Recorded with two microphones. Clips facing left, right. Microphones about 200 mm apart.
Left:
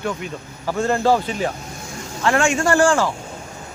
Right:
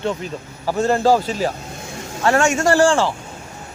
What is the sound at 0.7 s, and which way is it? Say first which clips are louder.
A man's voice: right 2 dB; 40° right (ahead or behind).